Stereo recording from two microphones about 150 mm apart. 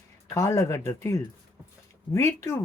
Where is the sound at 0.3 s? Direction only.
20° left (ahead or behind).